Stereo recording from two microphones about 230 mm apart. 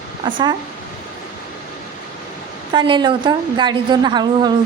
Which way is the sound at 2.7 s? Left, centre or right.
Right.